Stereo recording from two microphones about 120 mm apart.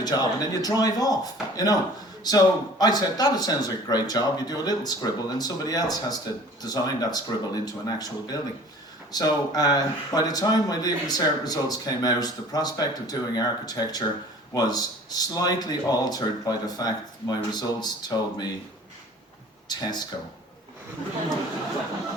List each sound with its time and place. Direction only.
0.0 s speech: 35° left (ahead or behind)
19.6 s speech: 35° left (ahead or behind)